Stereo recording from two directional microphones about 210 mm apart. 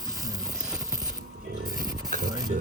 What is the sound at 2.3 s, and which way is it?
Speech, 20° right (ahead or behind).